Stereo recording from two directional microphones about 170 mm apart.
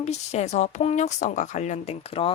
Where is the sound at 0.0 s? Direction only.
40° left (ahead or behind).